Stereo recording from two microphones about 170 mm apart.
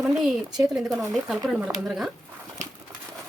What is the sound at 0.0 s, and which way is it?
Speech, centre (ahead or behind).